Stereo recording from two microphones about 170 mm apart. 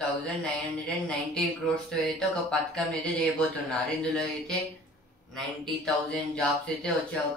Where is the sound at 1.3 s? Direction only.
5° left (ahead or behind).